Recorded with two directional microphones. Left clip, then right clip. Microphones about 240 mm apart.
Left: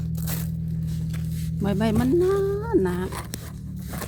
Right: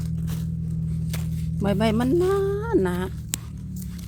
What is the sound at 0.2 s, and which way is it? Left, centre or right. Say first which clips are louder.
Tearing: left 2 dB; left.